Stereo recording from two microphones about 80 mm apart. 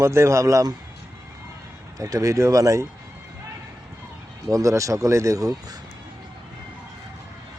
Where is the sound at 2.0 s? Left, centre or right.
Right.